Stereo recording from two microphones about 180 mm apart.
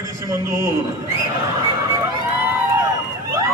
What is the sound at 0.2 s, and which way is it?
Speech, 15° right (ahead or behind).